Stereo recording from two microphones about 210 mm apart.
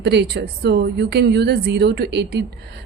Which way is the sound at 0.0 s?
55° right (ahead or behind).